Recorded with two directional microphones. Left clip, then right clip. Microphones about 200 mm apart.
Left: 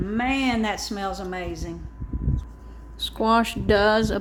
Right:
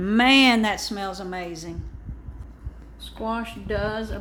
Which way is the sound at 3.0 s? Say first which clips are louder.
Left 9 dB; 55° left (ahead or behind).